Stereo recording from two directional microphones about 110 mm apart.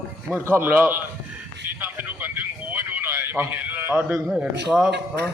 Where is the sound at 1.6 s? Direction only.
15° right (ahead or behind).